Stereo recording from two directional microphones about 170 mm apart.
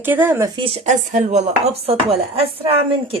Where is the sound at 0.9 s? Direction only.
45° right (ahead or behind).